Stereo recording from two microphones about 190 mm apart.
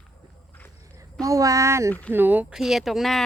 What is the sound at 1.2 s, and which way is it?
Speech, 20° right (ahead or behind).